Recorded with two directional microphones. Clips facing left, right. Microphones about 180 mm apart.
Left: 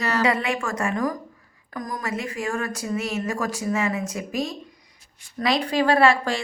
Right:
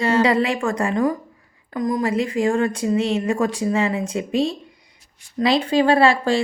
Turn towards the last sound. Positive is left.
turn(degrees=-30)  # may be behind; listen again after turning